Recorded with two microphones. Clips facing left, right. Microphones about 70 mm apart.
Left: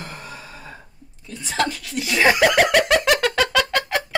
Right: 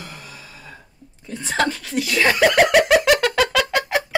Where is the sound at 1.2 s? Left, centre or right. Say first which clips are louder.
Right 2 dB; right.